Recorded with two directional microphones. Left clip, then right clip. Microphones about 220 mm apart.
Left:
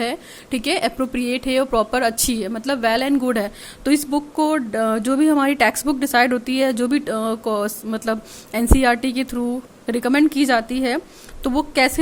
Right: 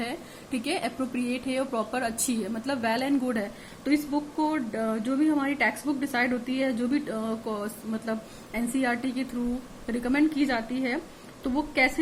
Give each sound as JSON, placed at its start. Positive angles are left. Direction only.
{"t": 0.0, "sound": "speech", "side_deg": 45}